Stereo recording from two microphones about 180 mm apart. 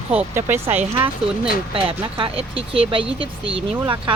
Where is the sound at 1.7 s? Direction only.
30° right (ahead or behind).